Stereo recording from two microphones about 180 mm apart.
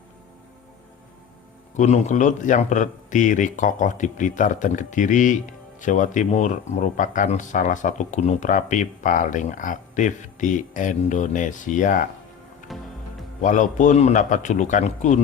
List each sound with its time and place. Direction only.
1.7 s speech: 40° left (ahead or behind)
12.6 s music: centre (ahead or behind)
13.4 s speech: 45° left (ahead or behind)